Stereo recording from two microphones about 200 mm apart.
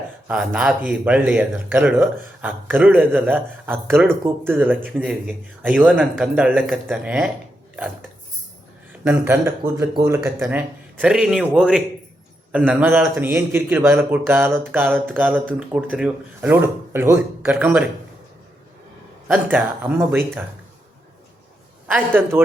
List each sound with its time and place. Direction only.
0.3 s a man's voice: 5° right (ahead or behind)
8.9 s a man's voice: 10° right (ahead or behind)
10.2 s a man's voice: 10° right (ahead or behind)
19.3 s a man's voice: 10° right (ahead or behind)
21.8 s a man's voice: 10° right (ahead or behind)